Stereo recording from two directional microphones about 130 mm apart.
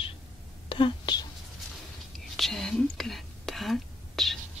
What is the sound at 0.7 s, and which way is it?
Whispering, 40° left (ahead or behind).